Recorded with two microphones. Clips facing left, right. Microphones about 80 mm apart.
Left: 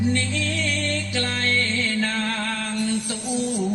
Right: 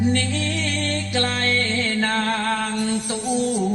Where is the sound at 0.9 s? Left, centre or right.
Right.